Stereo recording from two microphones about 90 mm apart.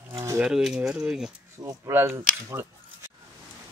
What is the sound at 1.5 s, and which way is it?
Speech, 35° right (ahead or behind).